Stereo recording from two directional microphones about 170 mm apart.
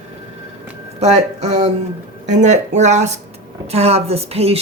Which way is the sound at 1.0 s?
40° right (ahead or behind).